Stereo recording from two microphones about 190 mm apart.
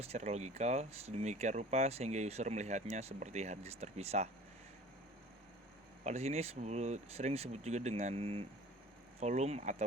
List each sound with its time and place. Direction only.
0.0 s speech: 35° right (ahead or behind)
6.1 s speech: 35° right (ahead or behind)